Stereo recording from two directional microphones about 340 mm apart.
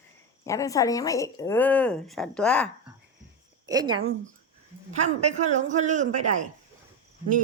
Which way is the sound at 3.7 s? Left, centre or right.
Centre.